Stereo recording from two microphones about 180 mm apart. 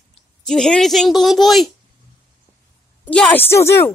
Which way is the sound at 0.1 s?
5° left (ahead or behind).